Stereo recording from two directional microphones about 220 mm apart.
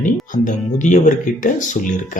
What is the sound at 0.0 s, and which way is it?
Speech, 35° left (ahead or behind).